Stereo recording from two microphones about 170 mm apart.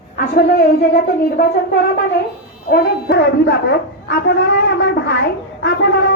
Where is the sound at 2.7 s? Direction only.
70° left (ahead or behind).